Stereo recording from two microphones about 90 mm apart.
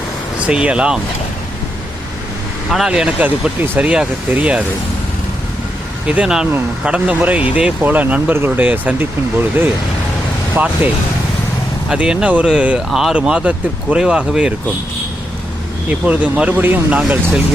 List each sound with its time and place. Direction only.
0.3 s speech: 10° right (ahead or behind)
2.6 s speech: 5° right (ahead or behind)
6.1 s speech: 10° right (ahead or behind)
10.5 s speech: 20° right (ahead or behind)
15.9 s speech: 15° right (ahead or behind)